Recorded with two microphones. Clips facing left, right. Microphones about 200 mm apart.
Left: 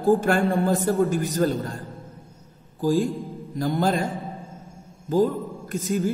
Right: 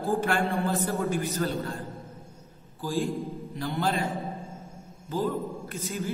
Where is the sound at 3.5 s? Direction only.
45° left (ahead or behind).